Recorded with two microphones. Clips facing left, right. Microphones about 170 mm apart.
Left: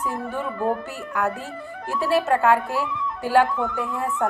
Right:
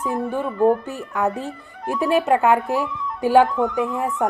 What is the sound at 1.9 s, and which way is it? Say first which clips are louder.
A woman's voice: right 3 dB; 20° right (ahead or behind).